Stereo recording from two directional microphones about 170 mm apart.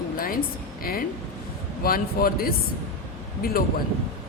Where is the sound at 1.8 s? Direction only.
60° left (ahead or behind).